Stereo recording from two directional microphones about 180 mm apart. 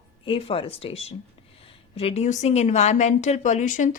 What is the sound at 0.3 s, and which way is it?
Speech, 30° left (ahead or behind).